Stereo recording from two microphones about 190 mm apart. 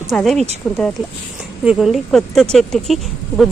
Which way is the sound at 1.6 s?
5° right (ahead or behind).